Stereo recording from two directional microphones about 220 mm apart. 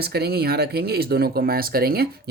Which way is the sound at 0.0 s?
45° right (ahead or behind).